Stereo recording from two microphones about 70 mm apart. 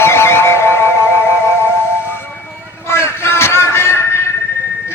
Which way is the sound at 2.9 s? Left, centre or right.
Left.